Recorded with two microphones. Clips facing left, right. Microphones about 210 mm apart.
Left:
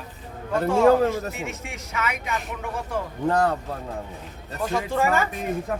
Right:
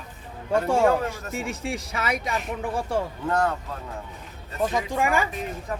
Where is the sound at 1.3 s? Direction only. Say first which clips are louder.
Right 4 dB; 35° right (ahead or behind).